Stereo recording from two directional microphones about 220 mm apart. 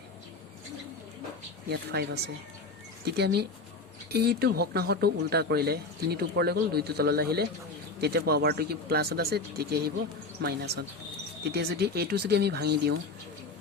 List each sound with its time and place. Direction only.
1.7 s speech: 50° right (ahead or behind)